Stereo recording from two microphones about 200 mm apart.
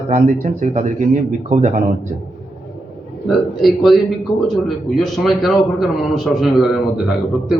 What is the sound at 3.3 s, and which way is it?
A man's voice, centre (ahead or behind).